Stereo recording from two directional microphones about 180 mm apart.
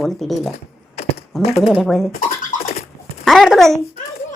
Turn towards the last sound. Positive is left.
turn(degrees=0)  # may be behind; listen again after turning